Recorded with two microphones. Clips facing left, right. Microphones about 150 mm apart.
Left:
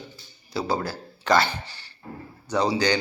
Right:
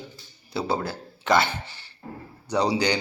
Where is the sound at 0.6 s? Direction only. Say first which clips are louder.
Even; 25° right (ahead or behind).